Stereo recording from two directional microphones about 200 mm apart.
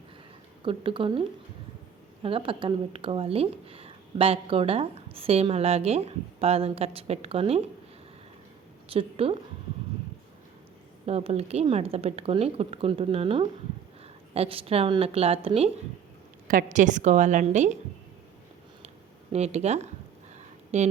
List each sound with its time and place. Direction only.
0.6 s speech: 25° right (ahead or behind)
2.2 s speech: 25° right (ahead or behind)
8.9 s speech: 30° right (ahead or behind)
11.0 s speech: 30° right (ahead or behind)
16.5 s a woman's voice: 40° right (ahead or behind)
19.3 s a woman's voice: 30° right (ahead or behind)
20.3 s a sound: 35° right (ahead or behind)